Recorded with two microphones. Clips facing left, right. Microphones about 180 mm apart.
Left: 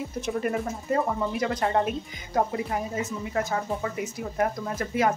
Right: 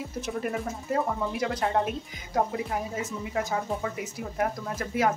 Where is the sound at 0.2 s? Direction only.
Centre (ahead or behind).